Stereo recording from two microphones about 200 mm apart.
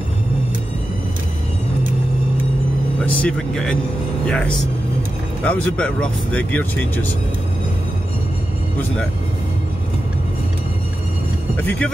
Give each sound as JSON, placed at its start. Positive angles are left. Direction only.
{"t": 3.2, "sound": "speech", "side_deg": 5}
{"t": 11.5, "sound": "speech", "side_deg": 10}